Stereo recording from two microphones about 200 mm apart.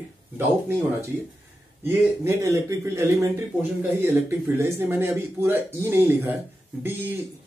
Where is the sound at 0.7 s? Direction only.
10° right (ahead or behind).